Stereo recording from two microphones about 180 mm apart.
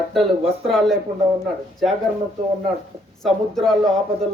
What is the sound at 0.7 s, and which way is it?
Speech, centre (ahead or behind).